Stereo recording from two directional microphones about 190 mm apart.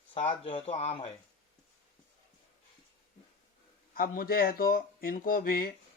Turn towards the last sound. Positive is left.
turn(degrees=50)  # may be behind; listen again after turning